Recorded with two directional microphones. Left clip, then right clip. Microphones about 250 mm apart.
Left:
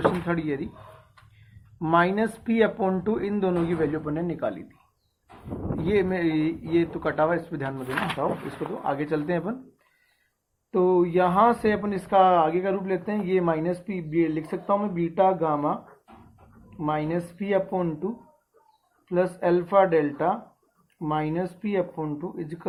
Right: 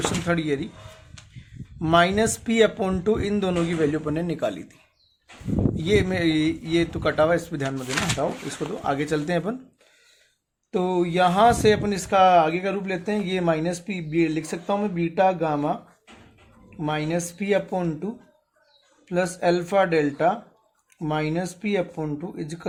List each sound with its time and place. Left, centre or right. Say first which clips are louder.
0.3 s speech: right 3 dB; right
1.8 s speech: right 3 dB; right
5.8 s speech: right 1 dB; right
8.8 s speech: right 2 dB; right
10.7 s speech: left 2 dB; right
16.8 s speech: right 1 dB; right
19.0 s speech: right 1 dB; right